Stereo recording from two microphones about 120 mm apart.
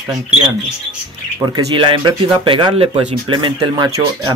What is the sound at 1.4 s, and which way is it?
Speech, 40° right (ahead or behind).